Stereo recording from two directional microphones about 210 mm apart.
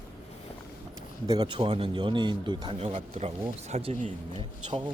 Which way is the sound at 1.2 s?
20° right (ahead or behind).